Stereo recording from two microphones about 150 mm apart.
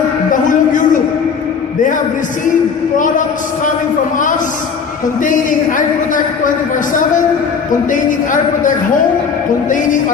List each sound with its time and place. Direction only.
0.3 s music: 60° left (ahead or behind)
5.2 s a man's voice: 60° left (ahead or behind)
7.9 s a man's voice: 60° left (ahead or behind)